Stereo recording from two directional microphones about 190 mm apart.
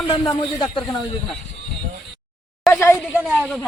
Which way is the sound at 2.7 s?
15° left (ahead or behind).